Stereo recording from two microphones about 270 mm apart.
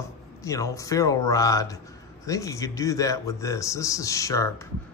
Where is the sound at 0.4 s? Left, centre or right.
Centre.